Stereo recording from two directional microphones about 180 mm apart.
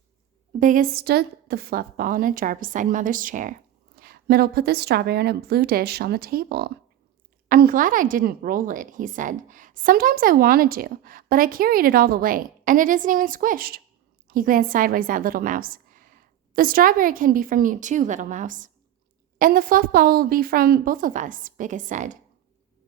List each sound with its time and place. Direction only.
0.6 s a woman's voice: 50° right (ahead or behind)